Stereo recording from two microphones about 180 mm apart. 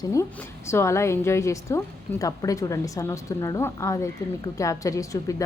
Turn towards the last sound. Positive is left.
turn(degrees=20)  # may be behind; listen again after turning